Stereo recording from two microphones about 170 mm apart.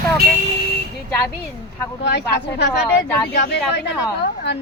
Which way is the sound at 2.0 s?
85° left.